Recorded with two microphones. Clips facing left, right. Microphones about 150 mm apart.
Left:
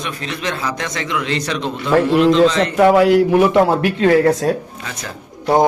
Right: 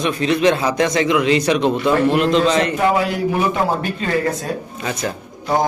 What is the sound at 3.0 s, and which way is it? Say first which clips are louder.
Speech: left 7 dB; 80° left.